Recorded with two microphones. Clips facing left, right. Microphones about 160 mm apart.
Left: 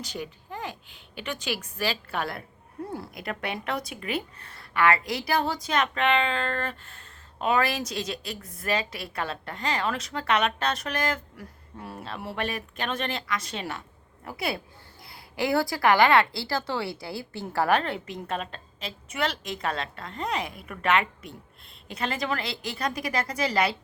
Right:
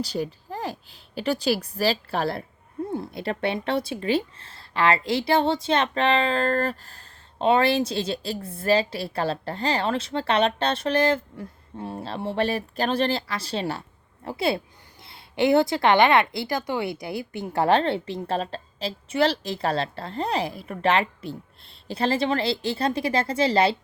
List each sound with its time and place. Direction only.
0.0 s speech: 35° right (ahead or behind)